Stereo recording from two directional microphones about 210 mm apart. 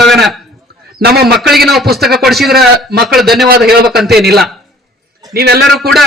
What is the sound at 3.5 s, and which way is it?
Speech, 50° right (ahead or behind).